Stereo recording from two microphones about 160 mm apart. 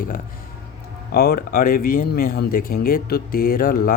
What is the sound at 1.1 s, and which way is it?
Speech, 75° left (ahead or behind).